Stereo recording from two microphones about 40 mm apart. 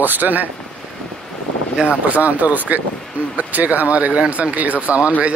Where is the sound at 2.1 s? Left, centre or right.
Right.